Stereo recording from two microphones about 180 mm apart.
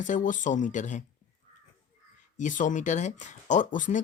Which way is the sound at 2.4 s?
45° left (ahead or behind).